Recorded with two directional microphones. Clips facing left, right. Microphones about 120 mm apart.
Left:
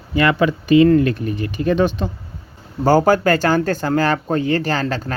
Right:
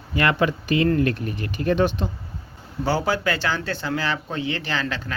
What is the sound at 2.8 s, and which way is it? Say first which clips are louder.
Speech: left 9 dB; 45° left (ahead or behind).